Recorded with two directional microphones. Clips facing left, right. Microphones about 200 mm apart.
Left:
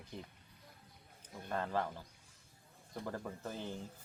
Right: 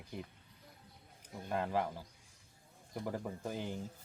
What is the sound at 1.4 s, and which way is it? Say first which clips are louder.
Speech: right 2 dB; 10° right (ahead or behind).